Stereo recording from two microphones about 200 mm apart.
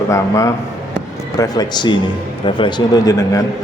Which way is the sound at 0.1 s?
15° left (ahead or behind).